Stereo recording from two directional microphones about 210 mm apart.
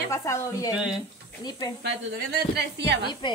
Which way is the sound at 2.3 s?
55° right (ahead or behind).